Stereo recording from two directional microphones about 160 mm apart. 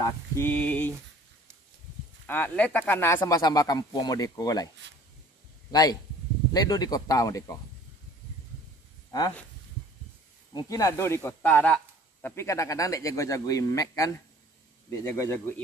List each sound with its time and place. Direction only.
0.0 s a sound: 10° left (ahead or behind)
2.2 s speech: 10° left (ahead or behind)
5.7 s speech: 25° left (ahead or behind)
10.5 s speech: 20° left (ahead or behind)